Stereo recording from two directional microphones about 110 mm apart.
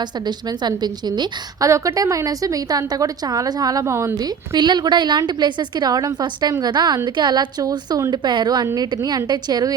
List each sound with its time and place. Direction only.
0.3 s a woman's voice: 40° right (ahead or behind)
4.2 s a woman's voice: 40° right (ahead or behind)